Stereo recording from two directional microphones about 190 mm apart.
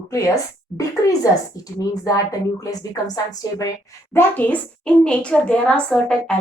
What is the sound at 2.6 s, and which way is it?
A woman's voice, 20° left (ahead or behind).